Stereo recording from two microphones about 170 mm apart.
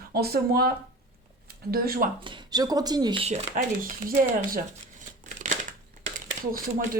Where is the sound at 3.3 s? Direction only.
50° right (ahead or behind).